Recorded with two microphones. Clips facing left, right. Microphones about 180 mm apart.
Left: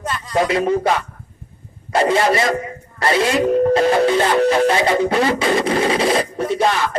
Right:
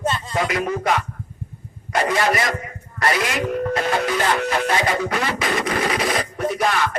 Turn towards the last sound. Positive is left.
turn(degrees=25)  # may be behind; listen again after turning